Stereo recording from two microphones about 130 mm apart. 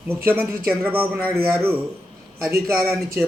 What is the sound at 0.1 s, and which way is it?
A man's voice, 15° right (ahead or behind).